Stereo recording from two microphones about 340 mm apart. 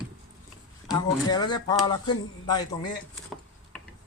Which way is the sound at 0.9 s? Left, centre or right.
Centre.